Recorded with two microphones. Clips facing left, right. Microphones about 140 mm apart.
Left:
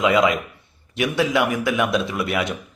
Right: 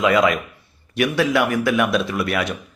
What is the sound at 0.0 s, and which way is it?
A man's voice, 20° left (ahead or behind).